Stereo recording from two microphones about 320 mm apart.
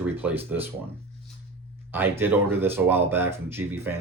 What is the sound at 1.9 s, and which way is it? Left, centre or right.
Speech, centre.